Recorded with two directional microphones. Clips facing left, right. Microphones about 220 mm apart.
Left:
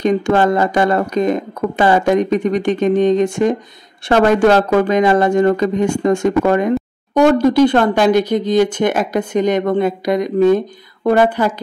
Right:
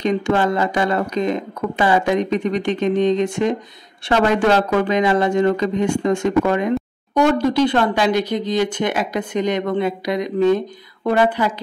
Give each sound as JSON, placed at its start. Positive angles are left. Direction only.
{"t": 0.0, "sound": "speech", "side_deg": 50}